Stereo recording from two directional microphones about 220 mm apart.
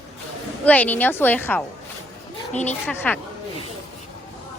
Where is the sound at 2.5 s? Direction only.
30° left (ahead or behind).